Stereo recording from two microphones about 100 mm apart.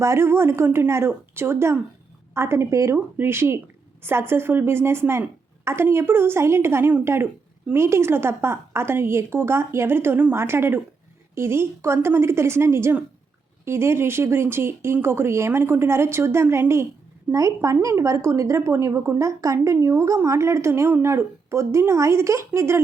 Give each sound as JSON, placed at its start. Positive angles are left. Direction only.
{"t": 0.0, "sound": "a woman's voice", "side_deg": -30}